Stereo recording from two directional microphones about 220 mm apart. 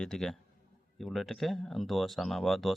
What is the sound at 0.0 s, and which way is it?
Speech, 5° left (ahead or behind).